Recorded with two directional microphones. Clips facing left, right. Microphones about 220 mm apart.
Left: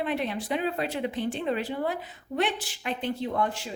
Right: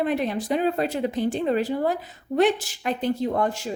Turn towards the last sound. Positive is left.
turn(degrees=-45)  # may be behind; listen again after turning